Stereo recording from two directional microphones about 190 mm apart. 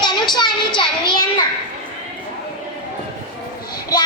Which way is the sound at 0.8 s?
25° left (ahead or behind).